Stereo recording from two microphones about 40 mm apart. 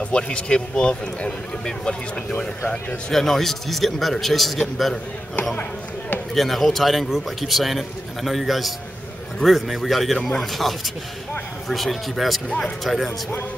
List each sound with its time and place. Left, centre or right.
0.0 s a man's voice: left
3.1 s a man's voice: centre
5.6 s speech: left
6.3 s a man's voice: centre
12.4 s a man's voice: left
12.8 s a man's voice: centre